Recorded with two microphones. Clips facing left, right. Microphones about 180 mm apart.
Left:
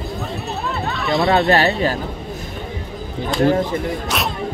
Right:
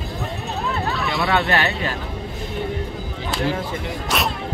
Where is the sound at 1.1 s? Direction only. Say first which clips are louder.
Left 7 dB; 35° left (ahead or behind).